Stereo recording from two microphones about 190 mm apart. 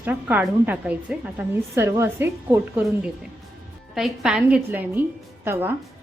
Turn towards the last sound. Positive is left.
turn(degrees=-10)  # may be behind; listen again after turning